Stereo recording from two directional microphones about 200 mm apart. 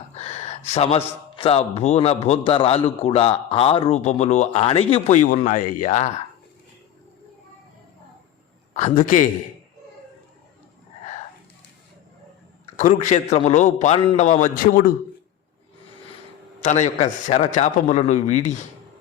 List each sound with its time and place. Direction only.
0.1 s speech: 30° left (ahead or behind)
8.7 s a man's voice: 35° left (ahead or behind)
12.7 s speech: 35° left (ahead or behind)
16.6 s speech: 35° left (ahead or behind)